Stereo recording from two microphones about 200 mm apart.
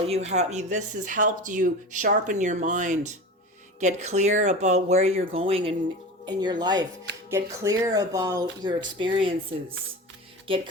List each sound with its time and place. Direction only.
0.1 s speech: 35° right (ahead or behind)